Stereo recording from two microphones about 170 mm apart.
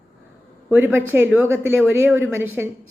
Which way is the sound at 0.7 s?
15° right (ahead or behind).